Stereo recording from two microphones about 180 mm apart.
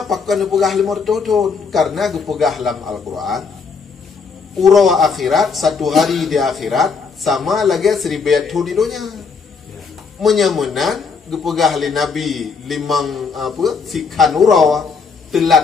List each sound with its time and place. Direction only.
0.0 s a man's voice: centre (ahead or behind)
4.6 s a man's voice: centre (ahead or behind)
10.2 s a man's voice: centre (ahead or behind)